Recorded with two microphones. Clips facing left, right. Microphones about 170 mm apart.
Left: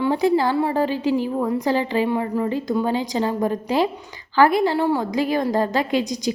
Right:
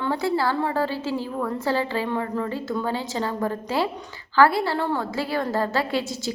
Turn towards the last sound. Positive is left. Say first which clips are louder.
# left 4 dB
turn(degrees=15)  # may be behind; listen again after turning